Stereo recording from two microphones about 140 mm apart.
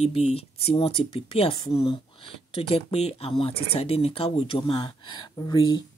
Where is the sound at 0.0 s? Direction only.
45° left (ahead or behind).